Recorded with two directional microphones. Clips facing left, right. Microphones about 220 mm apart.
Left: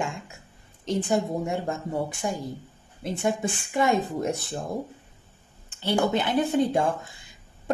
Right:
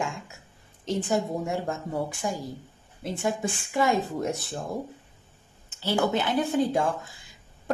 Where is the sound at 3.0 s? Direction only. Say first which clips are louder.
Left 2 dB; centre (ahead or behind).